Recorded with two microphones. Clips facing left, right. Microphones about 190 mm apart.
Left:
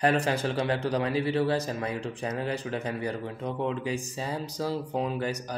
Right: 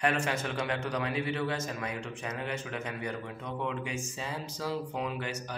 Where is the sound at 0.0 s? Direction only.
35° left (ahead or behind).